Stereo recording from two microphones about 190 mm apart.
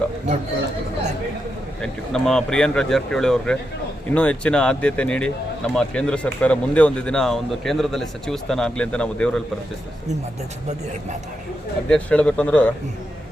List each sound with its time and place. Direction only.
1.8 s speech: centre (ahead or behind)
11.9 s speech: 5° left (ahead or behind)